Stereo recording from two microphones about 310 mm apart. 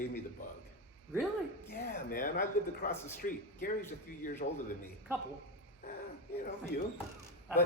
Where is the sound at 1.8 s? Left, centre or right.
Left.